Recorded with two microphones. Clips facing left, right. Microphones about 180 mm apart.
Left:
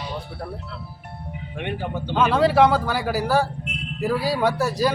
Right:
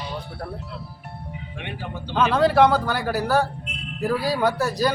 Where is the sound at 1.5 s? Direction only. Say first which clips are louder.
Left 7 dB; 50° left (ahead or behind).